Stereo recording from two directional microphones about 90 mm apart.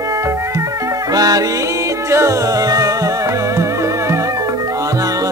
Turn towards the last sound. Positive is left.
turn(degrees=-35)  # may be behind; listen again after turning